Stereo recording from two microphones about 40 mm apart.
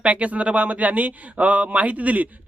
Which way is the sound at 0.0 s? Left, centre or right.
Right.